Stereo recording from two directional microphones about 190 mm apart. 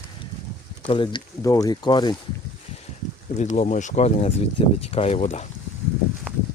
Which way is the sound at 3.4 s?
40° left (ahead or behind).